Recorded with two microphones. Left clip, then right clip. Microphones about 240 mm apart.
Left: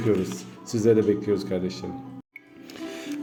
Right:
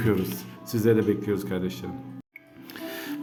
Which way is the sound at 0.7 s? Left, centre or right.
Centre.